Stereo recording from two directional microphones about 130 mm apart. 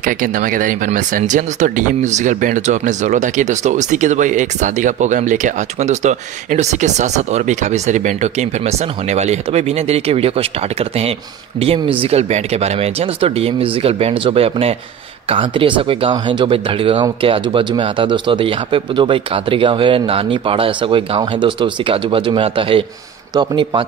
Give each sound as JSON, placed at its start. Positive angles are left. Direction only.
{"t": 0.0, "sound": "speech", "side_deg": -90}